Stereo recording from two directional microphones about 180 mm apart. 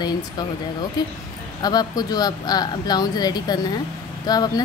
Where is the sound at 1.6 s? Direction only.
20° left (ahead or behind).